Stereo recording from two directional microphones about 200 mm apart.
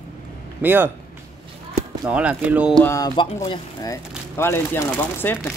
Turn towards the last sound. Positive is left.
turn(degrees=10)  # may be behind; listen again after turning